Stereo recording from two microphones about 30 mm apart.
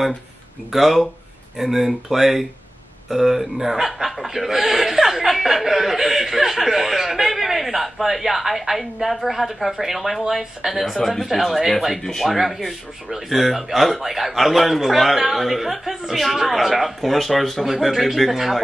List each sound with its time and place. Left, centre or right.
0.7 s a man's voice: centre
10.8 s a man's voice: centre
12.0 s speech: centre
12.3 s a man's voice: centre